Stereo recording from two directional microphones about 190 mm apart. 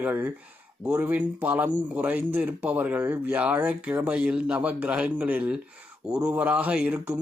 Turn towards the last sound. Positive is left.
turn(degrees=-5)  # may be behind; listen again after turning